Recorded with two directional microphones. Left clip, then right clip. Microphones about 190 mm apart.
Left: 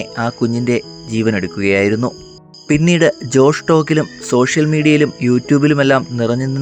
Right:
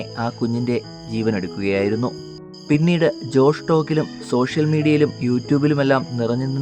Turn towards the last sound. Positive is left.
turn(degrees=20)  # may be behind; listen again after turning